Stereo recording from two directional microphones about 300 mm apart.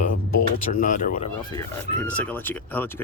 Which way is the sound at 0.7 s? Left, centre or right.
Left.